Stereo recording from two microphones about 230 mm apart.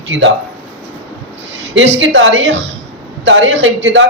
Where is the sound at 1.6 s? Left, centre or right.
Right.